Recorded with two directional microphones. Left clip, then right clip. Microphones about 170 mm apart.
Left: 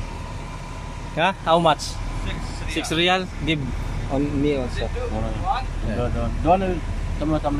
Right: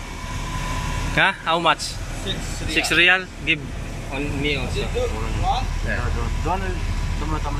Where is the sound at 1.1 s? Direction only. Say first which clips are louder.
Even; 15° left (ahead or behind).